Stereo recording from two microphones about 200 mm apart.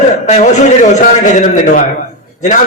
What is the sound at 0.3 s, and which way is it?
A man's voice, 35° left (ahead or behind).